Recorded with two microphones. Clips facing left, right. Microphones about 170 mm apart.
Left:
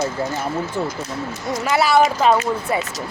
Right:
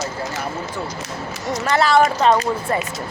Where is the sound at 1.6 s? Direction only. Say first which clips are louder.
Even; 10° left (ahead or behind).